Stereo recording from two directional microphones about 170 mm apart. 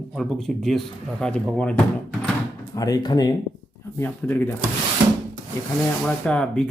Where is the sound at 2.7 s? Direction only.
20° left (ahead or behind).